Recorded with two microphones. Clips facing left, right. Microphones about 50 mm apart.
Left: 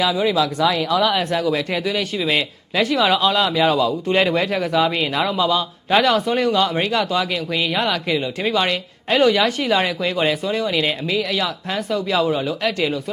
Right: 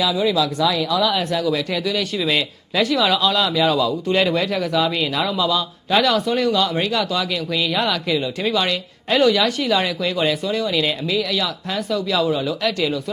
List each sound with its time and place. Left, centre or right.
0.0 s speech: left